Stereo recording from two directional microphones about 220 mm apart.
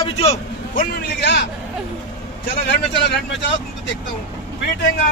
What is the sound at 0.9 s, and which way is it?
Speech, 50° left (ahead or behind).